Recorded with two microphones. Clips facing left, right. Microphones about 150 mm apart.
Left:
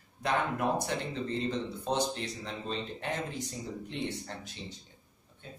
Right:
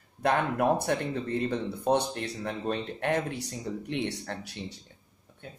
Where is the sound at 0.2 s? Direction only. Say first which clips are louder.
Right 5 dB; 60° right (ahead or behind).